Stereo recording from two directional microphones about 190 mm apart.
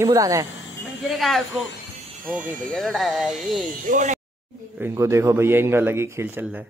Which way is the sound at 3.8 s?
40° right (ahead or behind).